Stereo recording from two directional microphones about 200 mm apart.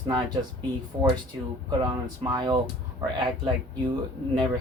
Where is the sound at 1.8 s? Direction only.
20° right (ahead or behind).